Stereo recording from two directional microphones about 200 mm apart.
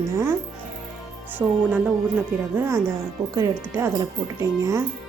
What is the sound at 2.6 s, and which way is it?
Speech, 10° right (ahead or behind).